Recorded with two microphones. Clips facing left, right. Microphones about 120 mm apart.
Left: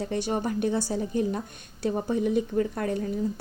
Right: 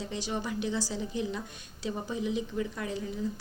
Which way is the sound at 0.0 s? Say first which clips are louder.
Left 7 dB; 50° left (ahead or behind).